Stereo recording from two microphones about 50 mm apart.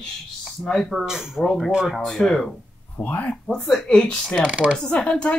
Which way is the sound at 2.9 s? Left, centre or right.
Left.